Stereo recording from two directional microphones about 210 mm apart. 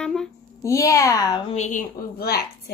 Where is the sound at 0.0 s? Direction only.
Centre (ahead or behind).